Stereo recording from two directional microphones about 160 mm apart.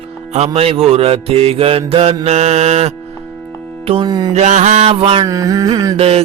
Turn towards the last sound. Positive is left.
turn(degrees=-40)  # may be behind; listen again after turning